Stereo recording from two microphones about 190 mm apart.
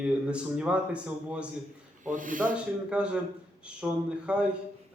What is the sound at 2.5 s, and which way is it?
A man's voice, 5° right (ahead or behind).